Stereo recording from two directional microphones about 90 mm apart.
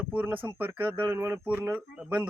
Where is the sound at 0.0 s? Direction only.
15° right (ahead or behind).